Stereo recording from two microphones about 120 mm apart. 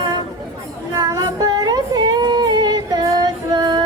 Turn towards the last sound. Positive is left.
turn(degrees=-35)  # may be behind; listen again after turning